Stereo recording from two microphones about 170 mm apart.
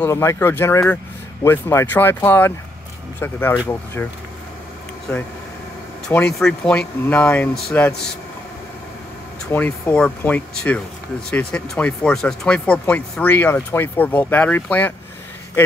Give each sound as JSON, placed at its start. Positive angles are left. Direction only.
{"t": 0.0, "sound": "speech", "side_deg": 15}
{"t": 6.3, "sound": "speech", "side_deg": 5}
{"t": 9.5, "sound": "speech", "side_deg": 10}